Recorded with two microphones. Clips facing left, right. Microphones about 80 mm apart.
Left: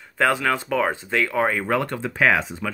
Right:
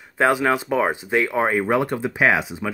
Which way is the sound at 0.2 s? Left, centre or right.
Centre.